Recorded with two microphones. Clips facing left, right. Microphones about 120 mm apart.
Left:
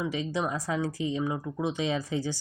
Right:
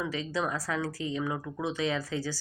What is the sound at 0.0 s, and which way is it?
Speech, 20° left (ahead or behind).